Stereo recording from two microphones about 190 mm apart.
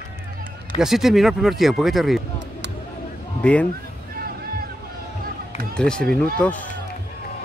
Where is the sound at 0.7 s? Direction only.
Centre (ahead or behind).